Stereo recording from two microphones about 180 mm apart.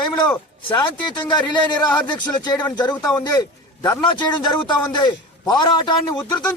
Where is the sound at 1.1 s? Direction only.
25° left (ahead or behind).